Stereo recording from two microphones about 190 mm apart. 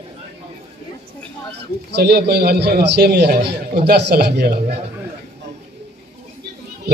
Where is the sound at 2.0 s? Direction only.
60° right (ahead or behind).